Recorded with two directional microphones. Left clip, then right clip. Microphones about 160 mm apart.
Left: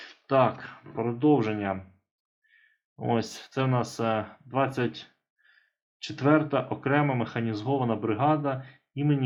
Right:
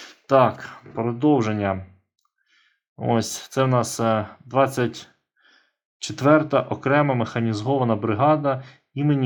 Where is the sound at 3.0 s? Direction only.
25° right (ahead or behind).